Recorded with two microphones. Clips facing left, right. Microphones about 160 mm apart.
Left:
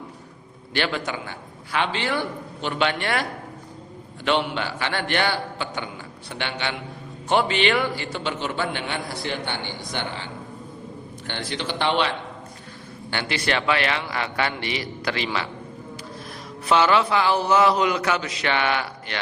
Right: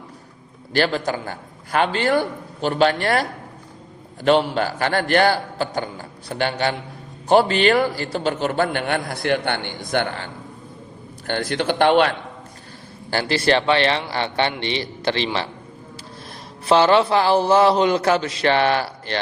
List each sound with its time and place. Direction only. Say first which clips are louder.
0.7 s a man's voice: right 5 dB; 40° right (ahead or behind)
11.3 s a man's voice: right 8 dB; 50° right (ahead or behind)
13.1 s a man's voice: right 7 dB; 35° right (ahead or behind)
16.6 s a man's voice: right 4 dB; 35° right (ahead or behind)